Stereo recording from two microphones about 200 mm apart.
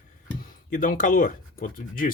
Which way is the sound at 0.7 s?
40° left (ahead or behind).